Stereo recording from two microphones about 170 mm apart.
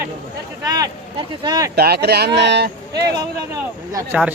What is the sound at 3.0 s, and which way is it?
Speech, 20° right (ahead or behind).